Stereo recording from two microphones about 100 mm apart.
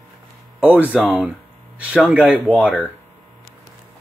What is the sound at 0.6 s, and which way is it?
Speech, 15° right (ahead or behind).